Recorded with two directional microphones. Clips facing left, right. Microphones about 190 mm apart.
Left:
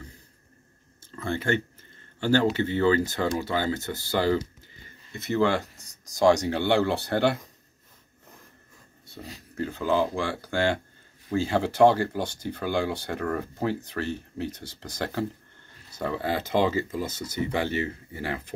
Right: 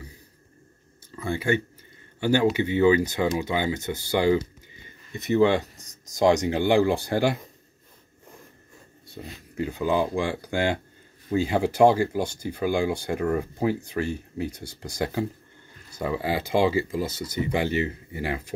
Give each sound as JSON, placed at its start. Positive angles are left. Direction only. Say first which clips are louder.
{"t": 1.1, "sound": "speech", "louder": "right 2 dB", "side_deg": -10}
{"t": 9.2, "sound": "speech", "louder": "right 2 dB", "side_deg": -15}